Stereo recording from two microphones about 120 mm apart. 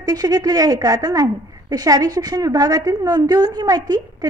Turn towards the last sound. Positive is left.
turn(degrees=-35)  # may be behind; listen again after turning